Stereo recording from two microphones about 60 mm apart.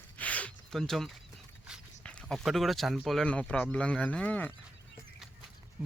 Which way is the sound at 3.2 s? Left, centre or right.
Centre.